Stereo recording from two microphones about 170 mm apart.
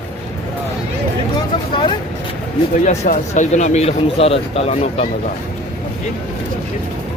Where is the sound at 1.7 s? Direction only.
30° left (ahead or behind).